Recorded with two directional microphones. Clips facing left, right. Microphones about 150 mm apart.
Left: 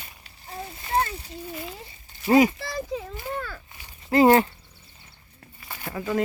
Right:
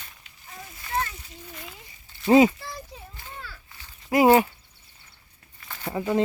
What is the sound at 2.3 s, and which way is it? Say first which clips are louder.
Speech: right 1 dB; 25° right (ahead or behind).